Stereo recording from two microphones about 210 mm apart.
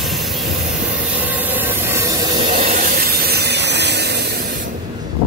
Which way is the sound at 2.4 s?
35° right (ahead or behind).